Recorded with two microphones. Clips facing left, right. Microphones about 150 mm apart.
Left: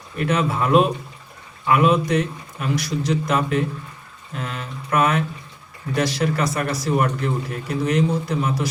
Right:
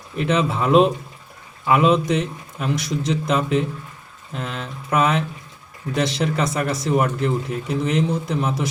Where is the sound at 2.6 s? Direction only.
20° right (ahead or behind).